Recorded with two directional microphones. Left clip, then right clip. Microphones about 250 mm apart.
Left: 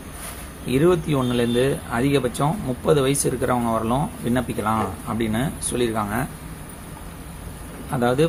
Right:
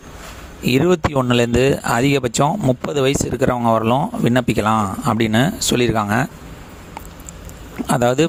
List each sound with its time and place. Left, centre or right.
0.6 s speech: right
7.9 s speech: right